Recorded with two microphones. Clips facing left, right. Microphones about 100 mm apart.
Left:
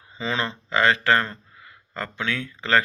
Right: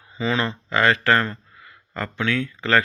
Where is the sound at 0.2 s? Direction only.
20° left (ahead or behind).